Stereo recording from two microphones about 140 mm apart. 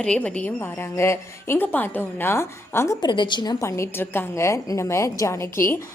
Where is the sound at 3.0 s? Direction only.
35° left (ahead or behind).